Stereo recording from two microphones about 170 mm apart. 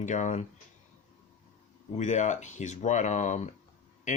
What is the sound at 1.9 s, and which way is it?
Speech, 45° left (ahead or behind).